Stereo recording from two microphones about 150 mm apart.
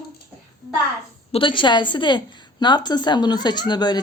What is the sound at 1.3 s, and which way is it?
A woman's voice, 35° left (ahead or behind).